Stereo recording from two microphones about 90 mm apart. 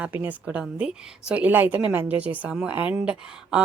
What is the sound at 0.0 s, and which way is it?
A woman's voice, 20° right (ahead or behind).